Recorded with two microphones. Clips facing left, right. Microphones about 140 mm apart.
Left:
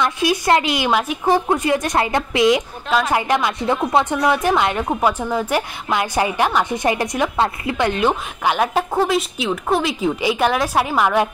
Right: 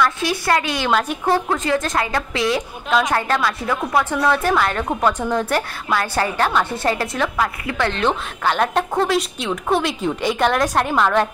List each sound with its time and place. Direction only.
0.3 s a woman's voice: 20° left (ahead or behind)
2.9 s a woman's voice: 5° left (ahead or behind)
3.2 s a woman's voice: 15° left (ahead or behind)